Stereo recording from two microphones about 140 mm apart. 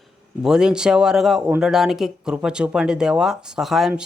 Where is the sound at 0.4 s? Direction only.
5° right (ahead or behind).